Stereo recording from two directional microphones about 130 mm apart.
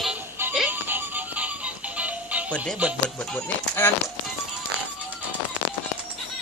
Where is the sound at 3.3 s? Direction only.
15° left (ahead or behind).